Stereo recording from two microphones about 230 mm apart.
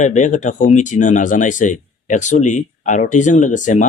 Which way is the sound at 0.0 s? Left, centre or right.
Left.